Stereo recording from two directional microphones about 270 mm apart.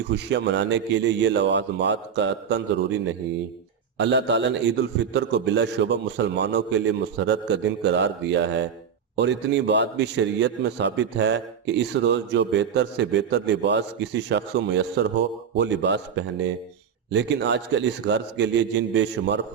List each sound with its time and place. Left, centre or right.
0.1 s a man's voice: right
3.9 s a man's voice: right